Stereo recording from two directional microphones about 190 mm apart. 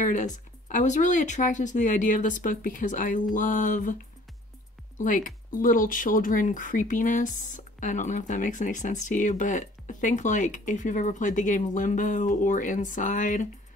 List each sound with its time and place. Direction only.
0.0 s speech: 40° left (ahead or behind)
4.9 s speech: 45° left (ahead or behind)